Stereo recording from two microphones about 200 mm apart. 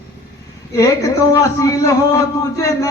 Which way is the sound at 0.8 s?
15° left (ahead or behind).